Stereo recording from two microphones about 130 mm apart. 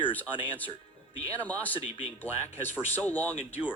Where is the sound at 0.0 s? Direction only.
15° left (ahead or behind).